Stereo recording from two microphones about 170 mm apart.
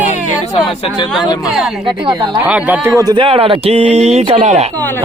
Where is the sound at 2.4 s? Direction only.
10° right (ahead or behind).